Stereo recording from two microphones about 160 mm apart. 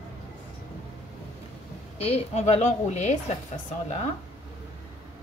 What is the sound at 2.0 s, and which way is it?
A woman's voice, 40° left (ahead or behind).